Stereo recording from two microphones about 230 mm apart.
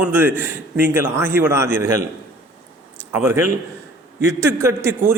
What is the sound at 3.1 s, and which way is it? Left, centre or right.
A man's voice, centre.